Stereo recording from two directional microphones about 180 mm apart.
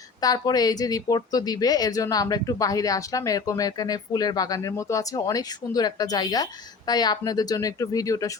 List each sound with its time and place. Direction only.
0.2 s speech: 20° left (ahead or behind)